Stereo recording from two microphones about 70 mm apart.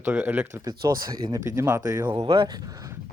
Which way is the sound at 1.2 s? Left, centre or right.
Right.